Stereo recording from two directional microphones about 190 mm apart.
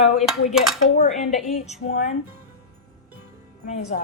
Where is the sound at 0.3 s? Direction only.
Centre (ahead or behind).